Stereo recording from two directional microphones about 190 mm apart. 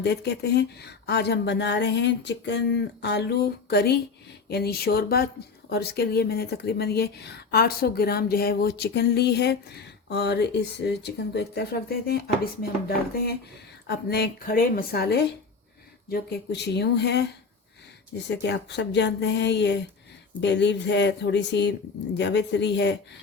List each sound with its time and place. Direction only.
0.0 s speech: 60° left (ahead or behind)
13.8 s speech: 60° left (ahead or behind)
18.3 s speech: 65° left (ahead or behind)